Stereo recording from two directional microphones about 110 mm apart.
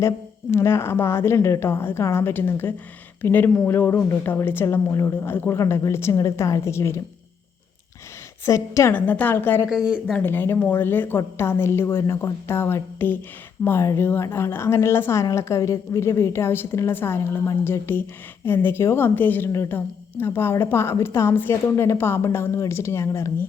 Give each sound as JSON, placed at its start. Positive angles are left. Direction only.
{"t": 0.5, "sound": "a woman's voice", "side_deg": 20}
{"t": 8.4, "sound": "a woman's voice", "side_deg": 30}
{"t": 8.9, "sound": "speech", "side_deg": 15}
{"t": 9.6, "sound": "speech", "side_deg": -5}
{"t": 10.1, "sound": "a woman's voice", "side_deg": 15}